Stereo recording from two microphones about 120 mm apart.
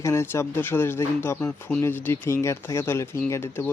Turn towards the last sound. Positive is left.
turn(degrees=20)  # may be behind; listen again after turning